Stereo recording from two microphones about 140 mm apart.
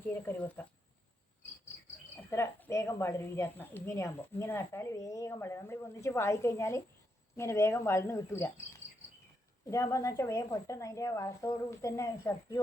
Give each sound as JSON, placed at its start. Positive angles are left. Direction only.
{"t": 0.1, "sound": "speech", "side_deg": 15}
{"t": 2.3, "sound": "a woman's voice", "side_deg": 20}